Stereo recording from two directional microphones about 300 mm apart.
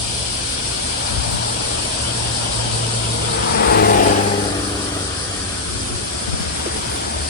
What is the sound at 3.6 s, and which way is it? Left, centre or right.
Vehicle, left.